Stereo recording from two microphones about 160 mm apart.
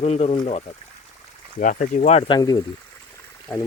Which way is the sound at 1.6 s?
50° left (ahead or behind).